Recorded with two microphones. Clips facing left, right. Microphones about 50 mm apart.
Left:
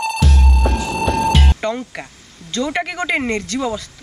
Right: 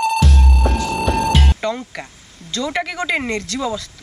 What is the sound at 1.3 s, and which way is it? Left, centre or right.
Music, centre.